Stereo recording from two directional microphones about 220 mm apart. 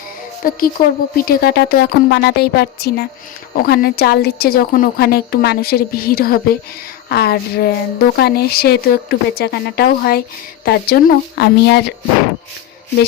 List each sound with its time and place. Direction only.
0.4 s a woman's voice: 40° left (ahead or behind)
0.8 s a woman's voice: 15° left (ahead or behind)
1.2 s a woman's voice: 45° left (ahead or behind)